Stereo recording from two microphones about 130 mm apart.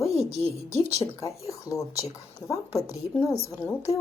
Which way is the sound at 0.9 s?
25° left (ahead or behind).